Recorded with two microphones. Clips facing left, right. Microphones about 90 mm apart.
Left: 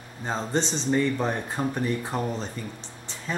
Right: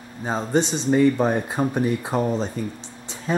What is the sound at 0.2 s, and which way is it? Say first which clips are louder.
Speech: right 5 dB; 10° right (ahead or behind).